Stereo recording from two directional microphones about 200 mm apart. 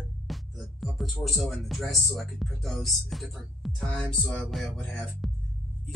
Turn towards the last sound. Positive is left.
turn(degrees=0)  # may be behind; listen again after turning